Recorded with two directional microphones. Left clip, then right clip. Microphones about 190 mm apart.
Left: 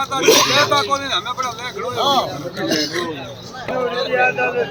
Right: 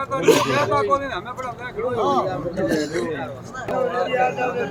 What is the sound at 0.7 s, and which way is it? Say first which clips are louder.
Speech: left 3 dB; 20° left (ahead or behind).